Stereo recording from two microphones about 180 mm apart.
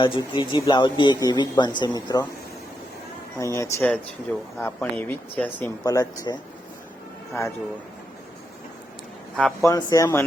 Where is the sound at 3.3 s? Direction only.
15° left (ahead or behind).